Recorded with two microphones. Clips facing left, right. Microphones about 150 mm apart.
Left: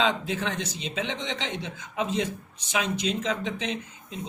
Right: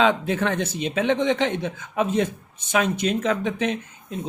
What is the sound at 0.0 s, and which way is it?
Speech, 55° right (ahead or behind).